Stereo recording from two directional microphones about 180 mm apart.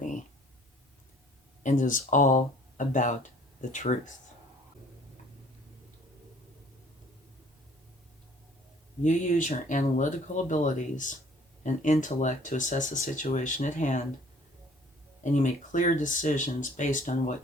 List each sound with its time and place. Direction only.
1.6 s speech: 45° left (ahead or behind)
9.0 s speech: 45° left (ahead or behind)
15.2 s speech: 45° left (ahead or behind)